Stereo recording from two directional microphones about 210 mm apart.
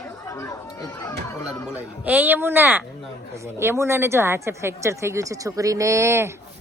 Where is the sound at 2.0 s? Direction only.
10° right (ahead or behind).